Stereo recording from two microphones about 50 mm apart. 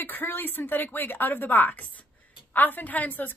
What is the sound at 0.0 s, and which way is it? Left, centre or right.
A woman's voice, left.